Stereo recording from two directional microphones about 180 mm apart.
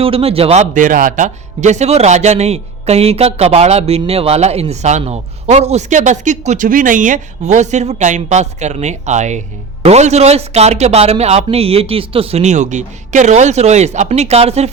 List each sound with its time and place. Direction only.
0.0 s speech: 30° right (ahead or behind)